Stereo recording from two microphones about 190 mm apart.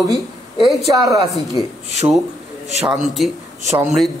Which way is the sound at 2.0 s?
20° right (ahead or behind).